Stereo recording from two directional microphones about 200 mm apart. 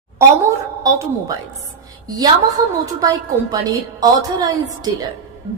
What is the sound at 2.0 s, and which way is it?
A woman's voice, 20° right (ahead or behind).